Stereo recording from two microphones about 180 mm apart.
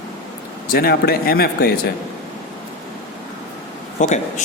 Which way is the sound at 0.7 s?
60° left (ahead or behind).